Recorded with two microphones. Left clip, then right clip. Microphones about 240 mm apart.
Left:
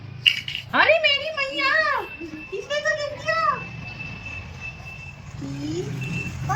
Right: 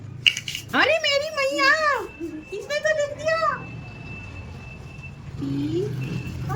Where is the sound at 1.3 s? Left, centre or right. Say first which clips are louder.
Right 3 dB; centre.